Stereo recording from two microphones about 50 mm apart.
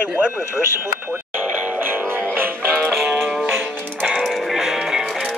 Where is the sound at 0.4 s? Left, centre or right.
Right.